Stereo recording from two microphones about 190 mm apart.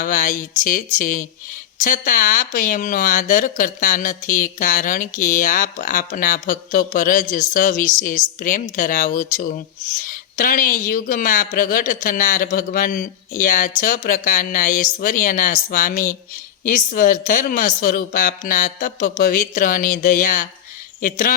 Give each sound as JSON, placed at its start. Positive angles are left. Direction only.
{"t": 0.0, "sound": "speech", "side_deg": 45}